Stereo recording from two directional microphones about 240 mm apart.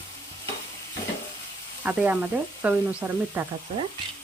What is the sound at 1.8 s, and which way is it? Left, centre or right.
Sizzle, centre.